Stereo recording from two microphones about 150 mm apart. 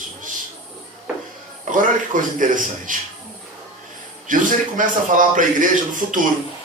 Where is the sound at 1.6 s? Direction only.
60° right (ahead or behind).